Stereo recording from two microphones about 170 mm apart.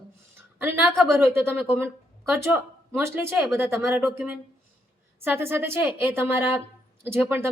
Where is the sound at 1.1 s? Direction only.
10° right (ahead or behind).